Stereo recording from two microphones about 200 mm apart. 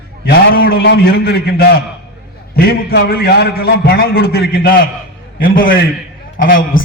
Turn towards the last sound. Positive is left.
turn(degrees=45)  # may be behind; listen again after turning